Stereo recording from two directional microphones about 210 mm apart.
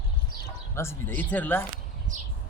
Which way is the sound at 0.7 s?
10° left (ahead or behind).